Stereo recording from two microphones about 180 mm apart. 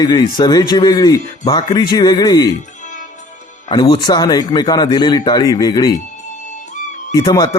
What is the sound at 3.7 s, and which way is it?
Speech, 25° left (ahead or behind).